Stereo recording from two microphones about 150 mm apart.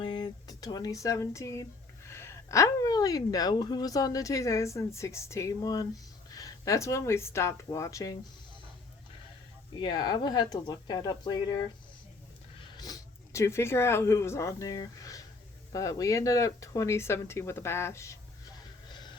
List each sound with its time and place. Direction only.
0.0 s speech: 30° left (ahead or behind)
9.7 s speech: 30° left (ahead or behind)
18.9 s music: 30° left (ahead or behind)